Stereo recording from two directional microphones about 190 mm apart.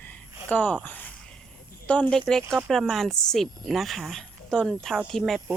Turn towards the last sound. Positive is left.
turn(degrees=0)  # may be behind; listen again after turning